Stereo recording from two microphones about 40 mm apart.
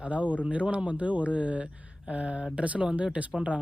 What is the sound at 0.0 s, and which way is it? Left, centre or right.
Speech, right.